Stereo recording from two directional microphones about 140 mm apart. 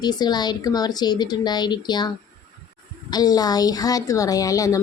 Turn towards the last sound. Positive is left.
turn(degrees=25)  # may be behind; listen again after turning